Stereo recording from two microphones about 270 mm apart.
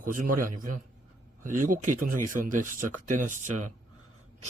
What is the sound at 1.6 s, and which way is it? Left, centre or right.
Speech, right.